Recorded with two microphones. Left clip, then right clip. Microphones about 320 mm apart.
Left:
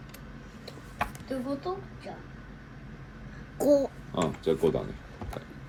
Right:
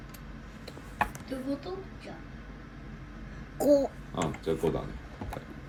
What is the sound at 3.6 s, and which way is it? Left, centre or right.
Speech, centre.